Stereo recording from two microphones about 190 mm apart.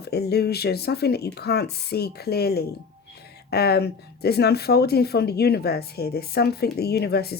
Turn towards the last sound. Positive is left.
turn(degrees=55)  # may be behind; listen again after turning